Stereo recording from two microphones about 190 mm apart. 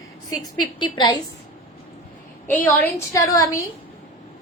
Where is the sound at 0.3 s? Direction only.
20° left (ahead or behind).